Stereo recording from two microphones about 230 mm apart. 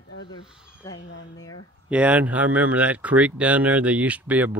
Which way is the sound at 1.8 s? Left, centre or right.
Centre.